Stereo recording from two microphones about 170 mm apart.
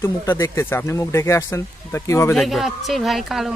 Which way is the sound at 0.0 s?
15° left (ahead or behind).